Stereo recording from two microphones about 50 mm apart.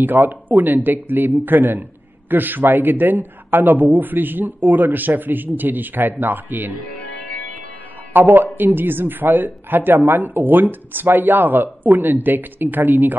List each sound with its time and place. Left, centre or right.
0.0 s speech: right
8.1 s speech: right